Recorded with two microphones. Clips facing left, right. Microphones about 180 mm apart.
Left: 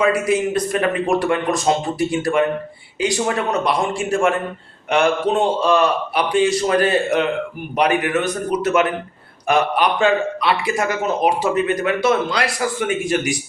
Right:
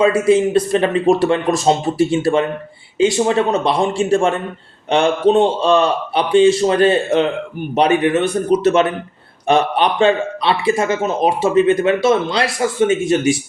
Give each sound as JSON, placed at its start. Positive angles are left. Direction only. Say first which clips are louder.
{"t": 0.0, "sound": "speech", "louder": "right 5 dB", "side_deg": -30}